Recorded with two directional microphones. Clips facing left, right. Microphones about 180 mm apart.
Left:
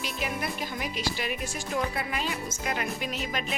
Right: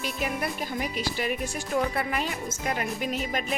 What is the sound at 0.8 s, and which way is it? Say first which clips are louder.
Speech: right 4 dB; 45° right (ahead or behind).